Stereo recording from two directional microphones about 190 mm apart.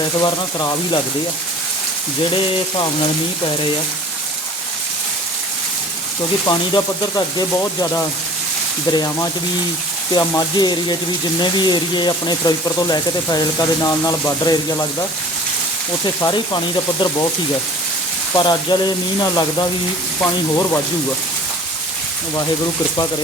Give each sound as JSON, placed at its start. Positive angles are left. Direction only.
{"t": 0.2, "sound": "speech", "side_deg": 20}
{"t": 7.3, "sound": "speech", "side_deg": 20}
{"t": 16.2, "sound": "speech", "side_deg": 20}
{"t": 18.3, "sound": "speech", "side_deg": 25}